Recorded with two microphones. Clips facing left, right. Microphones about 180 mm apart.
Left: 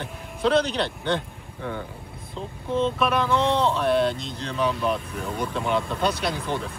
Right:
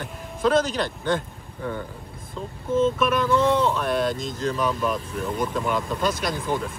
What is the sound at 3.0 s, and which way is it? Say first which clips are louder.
Speech: right 2 dB; 50° right (ahead or behind).